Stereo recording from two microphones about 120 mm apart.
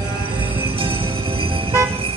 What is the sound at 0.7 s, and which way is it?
Music, 45° right (ahead or behind).